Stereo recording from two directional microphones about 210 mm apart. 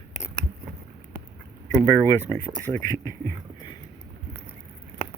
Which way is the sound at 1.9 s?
15° left (ahead or behind).